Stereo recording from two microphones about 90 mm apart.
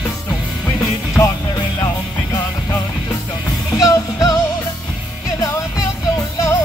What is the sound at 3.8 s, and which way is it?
Music, 40° left (ahead or behind).